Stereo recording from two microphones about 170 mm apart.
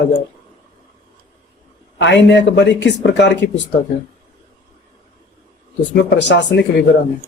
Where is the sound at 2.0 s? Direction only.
90° left.